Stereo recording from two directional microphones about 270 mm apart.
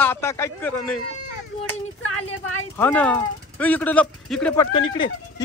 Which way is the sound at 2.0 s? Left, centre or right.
Left.